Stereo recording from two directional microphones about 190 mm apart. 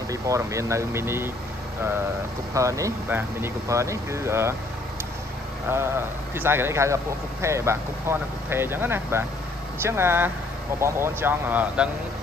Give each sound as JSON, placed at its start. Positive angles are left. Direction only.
{"t": 0.1, "sound": "speech", "side_deg": -15}
{"t": 2.5, "sound": "speech", "side_deg": -15}
{"t": 5.7, "sound": "speech", "side_deg": -10}